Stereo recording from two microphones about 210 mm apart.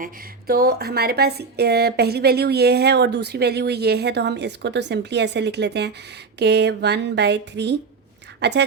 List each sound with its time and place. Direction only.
0.0 s a woman's voice: 45° right (ahead or behind)